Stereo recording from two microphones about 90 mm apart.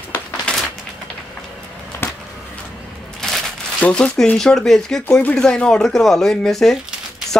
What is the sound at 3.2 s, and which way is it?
Crumpling, 5° left (ahead or behind).